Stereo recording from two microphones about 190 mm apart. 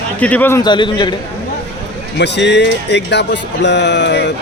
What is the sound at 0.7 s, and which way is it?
Speech, 25° left (ahead or behind).